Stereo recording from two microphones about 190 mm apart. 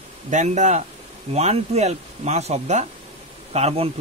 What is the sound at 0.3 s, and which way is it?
Speech, 40° right (ahead or behind).